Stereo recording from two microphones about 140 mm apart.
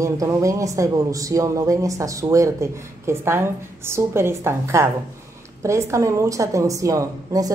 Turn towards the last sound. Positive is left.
turn(degrees=-25)  # may be behind; listen again after turning